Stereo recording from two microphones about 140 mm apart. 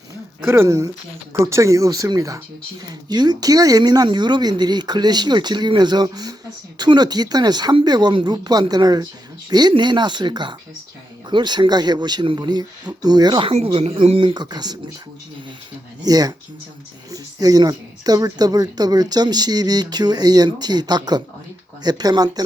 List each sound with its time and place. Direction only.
0.4 s speech: 15° right (ahead or behind)
16.0 s speech: 25° right (ahead or behind)